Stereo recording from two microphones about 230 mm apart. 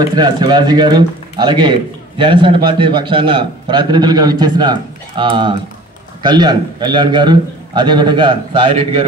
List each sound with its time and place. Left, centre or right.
0.0 s a man's voice: centre